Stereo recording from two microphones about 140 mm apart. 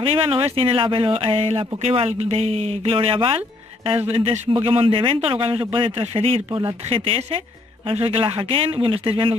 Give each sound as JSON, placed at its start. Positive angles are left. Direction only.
{"t": 0.0, "sound": "a man's voice", "side_deg": -40}